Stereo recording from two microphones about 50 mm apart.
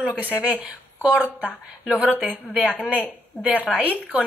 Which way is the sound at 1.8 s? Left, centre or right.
Centre.